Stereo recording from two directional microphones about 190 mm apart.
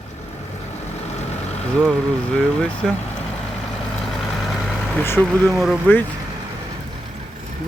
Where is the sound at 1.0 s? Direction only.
35° left (ahead or behind).